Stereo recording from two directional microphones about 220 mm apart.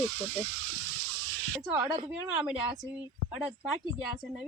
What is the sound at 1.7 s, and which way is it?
Speech, 15° right (ahead or behind).